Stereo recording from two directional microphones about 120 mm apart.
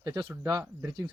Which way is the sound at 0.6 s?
20° right (ahead or behind).